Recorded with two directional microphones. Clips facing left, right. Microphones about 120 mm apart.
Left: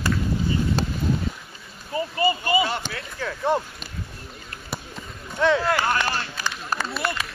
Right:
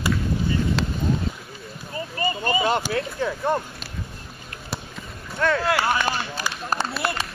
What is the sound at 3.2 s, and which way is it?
Speech, 20° right (ahead or behind).